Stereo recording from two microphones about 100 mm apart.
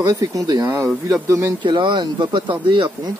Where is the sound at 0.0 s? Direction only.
35° right (ahead or behind).